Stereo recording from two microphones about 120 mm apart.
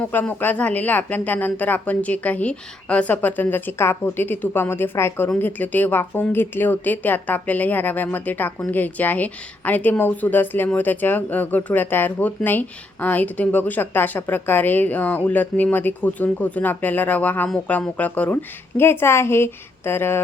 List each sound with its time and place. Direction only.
0.0 s a woman's voice: 15° left (ahead or behind)